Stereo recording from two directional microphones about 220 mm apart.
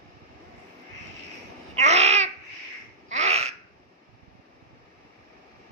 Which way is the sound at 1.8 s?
30° right (ahead or behind).